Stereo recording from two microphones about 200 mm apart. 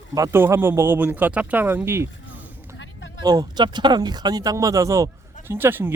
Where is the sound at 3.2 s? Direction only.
20° right (ahead or behind).